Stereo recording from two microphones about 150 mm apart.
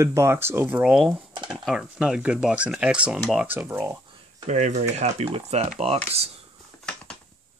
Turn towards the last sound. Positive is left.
turn(degrees=5)  # may be behind; listen again after turning